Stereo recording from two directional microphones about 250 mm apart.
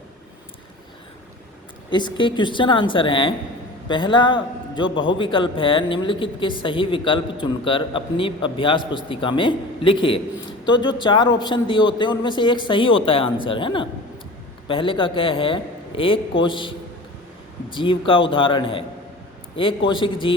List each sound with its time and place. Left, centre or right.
1.9 s a man's voice: centre